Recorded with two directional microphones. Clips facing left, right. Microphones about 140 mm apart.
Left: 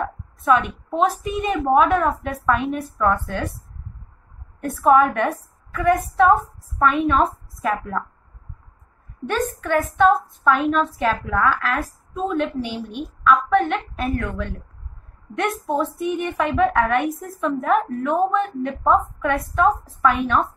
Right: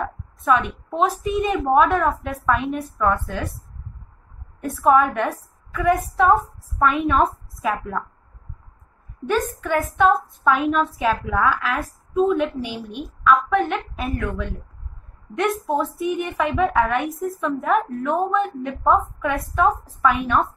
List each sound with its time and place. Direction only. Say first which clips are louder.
0.0 s a woman's voice: left 1 dB; centre (ahead or behind)
4.6 s a woman's voice: left 1 dB; centre (ahead or behind)
9.3 s a woman's voice: even; centre (ahead or behind)